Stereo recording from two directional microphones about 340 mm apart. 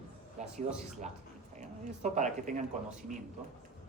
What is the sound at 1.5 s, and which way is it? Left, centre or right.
Speech, centre.